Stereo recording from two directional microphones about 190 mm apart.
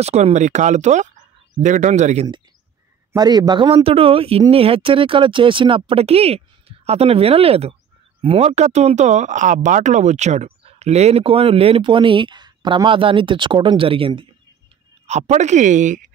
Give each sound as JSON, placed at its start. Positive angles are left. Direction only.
{"t": 0.0, "sound": "speech", "side_deg": -35}
{"t": 3.1, "sound": "speech", "side_deg": -20}